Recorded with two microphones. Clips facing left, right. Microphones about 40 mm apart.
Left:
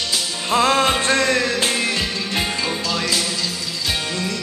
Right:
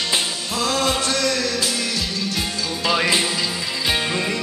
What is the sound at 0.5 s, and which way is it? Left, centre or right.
Music, left.